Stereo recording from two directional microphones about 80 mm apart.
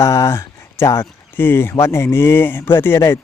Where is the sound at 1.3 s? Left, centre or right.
Left.